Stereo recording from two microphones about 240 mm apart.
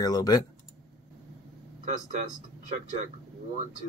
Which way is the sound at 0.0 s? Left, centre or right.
Centre.